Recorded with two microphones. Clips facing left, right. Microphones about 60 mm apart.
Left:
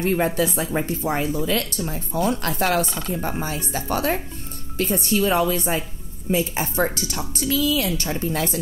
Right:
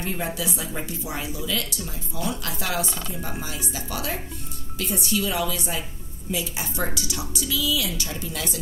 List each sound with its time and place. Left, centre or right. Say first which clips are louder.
0.0 s speech: left 8 dB; left